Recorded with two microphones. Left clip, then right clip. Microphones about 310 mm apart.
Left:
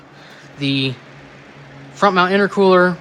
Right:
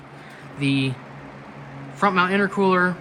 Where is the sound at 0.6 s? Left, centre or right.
Centre.